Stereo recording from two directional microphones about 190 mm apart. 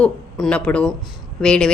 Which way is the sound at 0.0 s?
5° left (ahead or behind).